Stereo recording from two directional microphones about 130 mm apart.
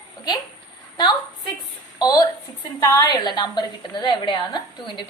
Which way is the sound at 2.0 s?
30° left (ahead or behind).